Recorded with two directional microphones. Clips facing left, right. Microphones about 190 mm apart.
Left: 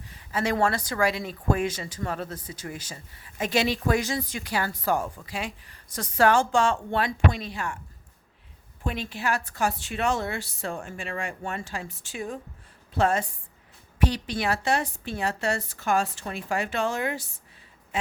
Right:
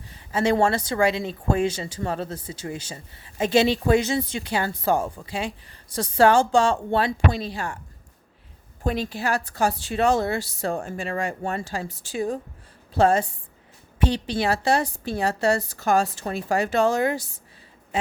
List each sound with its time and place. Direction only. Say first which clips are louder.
0.1 s speech: right 5 dB; 30° right (ahead or behind)
8.8 s speech: right 5 dB; 35° right (ahead or behind)